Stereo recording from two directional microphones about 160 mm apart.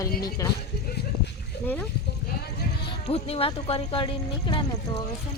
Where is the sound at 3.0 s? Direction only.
40° left (ahead or behind).